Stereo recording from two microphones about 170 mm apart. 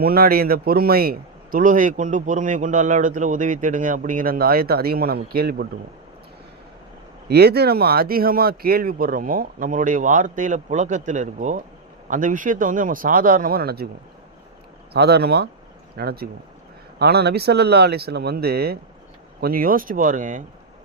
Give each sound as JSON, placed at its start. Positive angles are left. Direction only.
{"t": 0.0, "sound": "a man's voice", "side_deg": -60}
{"t": 7.3, "sound": "a man's voice", "side_deg": -70}
{"t": 14.9, "sound": "a man's voice", "side_deg": -70}